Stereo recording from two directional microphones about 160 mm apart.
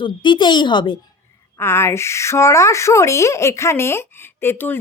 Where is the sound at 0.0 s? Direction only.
30° left (ahead or behind).